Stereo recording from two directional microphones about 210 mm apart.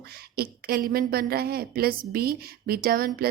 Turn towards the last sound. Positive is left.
turn(degrees=-45)  # may be behind; listen again after turning